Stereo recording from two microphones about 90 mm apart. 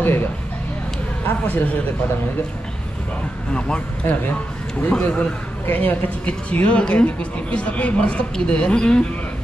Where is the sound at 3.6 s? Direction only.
10° left (ahead or behind).